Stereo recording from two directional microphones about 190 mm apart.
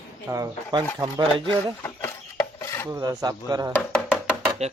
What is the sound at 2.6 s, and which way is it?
Filing, 15° left (ahead or behind).